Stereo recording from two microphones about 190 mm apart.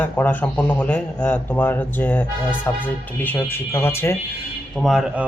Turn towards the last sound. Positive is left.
turn(degrees=0)  # may be behind; listen again after turning